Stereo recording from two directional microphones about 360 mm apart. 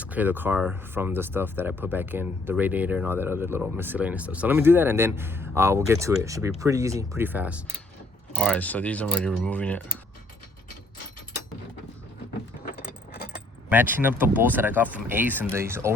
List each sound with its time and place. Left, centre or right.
0.0 s speech: centre
13.1 s keys jangling: left
13.7 s speech: centre